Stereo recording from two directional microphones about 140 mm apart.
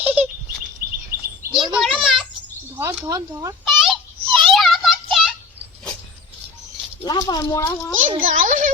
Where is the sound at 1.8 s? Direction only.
Centre (ahead or behind).